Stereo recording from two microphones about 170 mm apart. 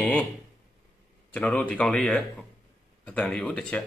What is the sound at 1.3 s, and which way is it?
Speech, 5° left (ahead or behind).